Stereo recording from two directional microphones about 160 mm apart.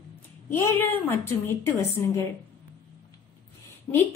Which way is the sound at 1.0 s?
15° left (ahead or behind).